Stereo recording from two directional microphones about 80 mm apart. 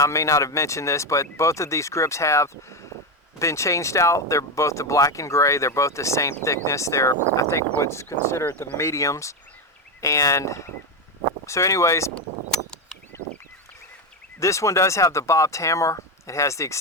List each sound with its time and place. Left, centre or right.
0.0 s speech: left
8.4 s speech: left
8.8 s speech: left
13.1 s a sound: left
14.3 s speech: left